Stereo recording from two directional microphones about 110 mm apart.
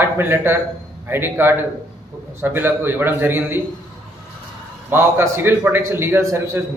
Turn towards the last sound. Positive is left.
turn(degrees=-25)  # may be behind; listen again after turning